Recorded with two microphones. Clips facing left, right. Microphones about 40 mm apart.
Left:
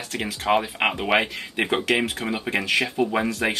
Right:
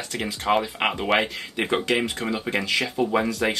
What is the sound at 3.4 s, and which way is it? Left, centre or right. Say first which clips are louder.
Speech: even; centre.